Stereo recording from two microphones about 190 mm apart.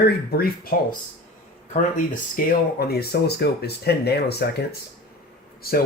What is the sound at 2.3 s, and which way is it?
Speech, 50° left (ahead or behind).